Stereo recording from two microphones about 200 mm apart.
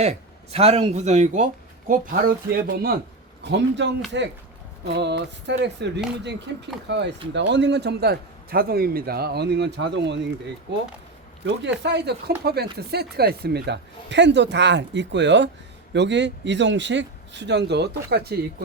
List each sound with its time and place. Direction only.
0.0 s a man's voice: 30° right (ahead or behind)
3.4 s a man's voice: 60° right (ahead or behind)
11.6 s a man's voice: 60° right (ahead or behind)